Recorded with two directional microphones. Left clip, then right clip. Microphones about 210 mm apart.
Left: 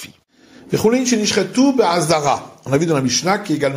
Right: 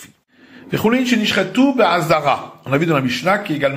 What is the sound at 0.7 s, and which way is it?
A man's voice, 25° left (ahead or behind).